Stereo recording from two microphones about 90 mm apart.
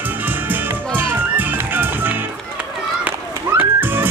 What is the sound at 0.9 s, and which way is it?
Music, 20° right (ahead or behind).